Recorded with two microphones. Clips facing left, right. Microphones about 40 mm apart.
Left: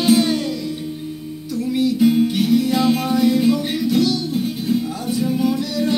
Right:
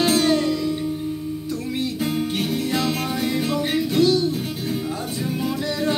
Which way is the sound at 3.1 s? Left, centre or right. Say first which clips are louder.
Left 7 dB; right.